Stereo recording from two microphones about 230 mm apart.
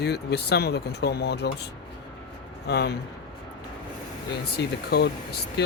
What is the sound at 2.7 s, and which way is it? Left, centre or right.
Speech, left.